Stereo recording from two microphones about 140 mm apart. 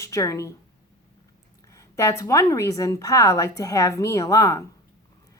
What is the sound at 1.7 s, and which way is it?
A woman's voice, 20° left (ahead or behind).